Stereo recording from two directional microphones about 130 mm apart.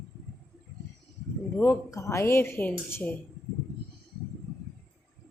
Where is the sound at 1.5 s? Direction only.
20° left (ahead or behind).